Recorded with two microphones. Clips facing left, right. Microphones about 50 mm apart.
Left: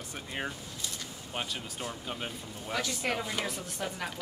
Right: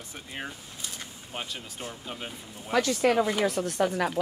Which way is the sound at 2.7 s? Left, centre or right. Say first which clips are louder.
Right 9 dB; right.